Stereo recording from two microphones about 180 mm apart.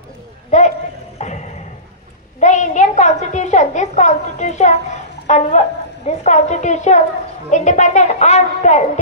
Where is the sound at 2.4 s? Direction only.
40° left (ahead or behind).